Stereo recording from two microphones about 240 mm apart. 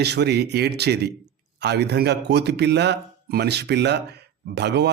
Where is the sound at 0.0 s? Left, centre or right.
Right.